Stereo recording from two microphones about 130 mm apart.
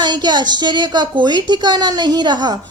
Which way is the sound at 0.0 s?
35° right (ahead or behind).